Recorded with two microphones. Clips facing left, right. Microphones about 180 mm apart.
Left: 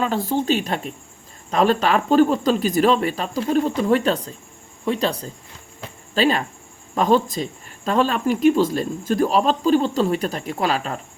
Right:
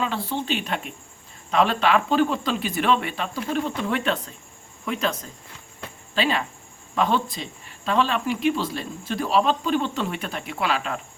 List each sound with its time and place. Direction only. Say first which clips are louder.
0.0 s speech: left 6 dB; 45° left (ahead or behind)